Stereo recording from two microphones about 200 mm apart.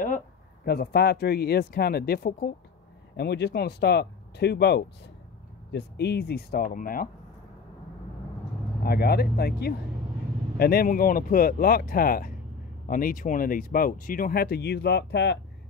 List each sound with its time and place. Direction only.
0.7 s speech: 50° left (ahead or behind)
8.8 s speech: 50° left (ahead or behind)